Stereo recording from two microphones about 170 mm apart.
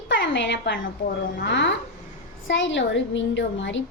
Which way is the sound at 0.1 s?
90° left.